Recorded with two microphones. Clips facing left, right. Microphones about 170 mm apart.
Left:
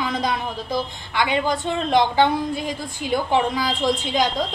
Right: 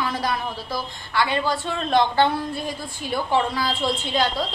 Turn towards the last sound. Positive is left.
turn(degrees=15)  # may be behind; listen again after turning